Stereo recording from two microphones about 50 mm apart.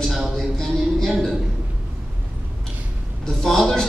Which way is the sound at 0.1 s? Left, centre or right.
Centre.